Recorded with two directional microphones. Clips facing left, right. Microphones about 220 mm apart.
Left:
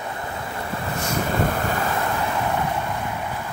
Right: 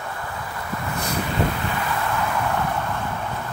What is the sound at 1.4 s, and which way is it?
Waves, 45° left (ahead or behind).